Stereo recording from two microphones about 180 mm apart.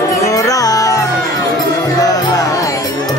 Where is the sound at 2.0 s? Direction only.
20° left (ahead or behind).